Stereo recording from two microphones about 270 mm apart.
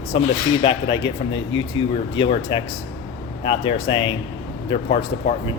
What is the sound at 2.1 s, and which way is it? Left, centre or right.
A man's voice, centre.